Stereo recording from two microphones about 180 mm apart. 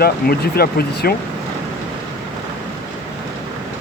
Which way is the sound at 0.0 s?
60° left (ahead or behind).